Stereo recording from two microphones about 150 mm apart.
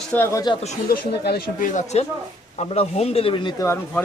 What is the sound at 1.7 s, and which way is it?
Speech, 50° left (ahead or behind).